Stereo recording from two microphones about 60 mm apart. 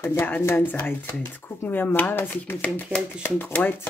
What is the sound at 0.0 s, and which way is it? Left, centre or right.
Speech, left.